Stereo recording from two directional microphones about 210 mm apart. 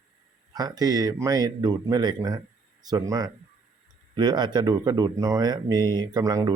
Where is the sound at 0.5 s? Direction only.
20° right (ahead or behind).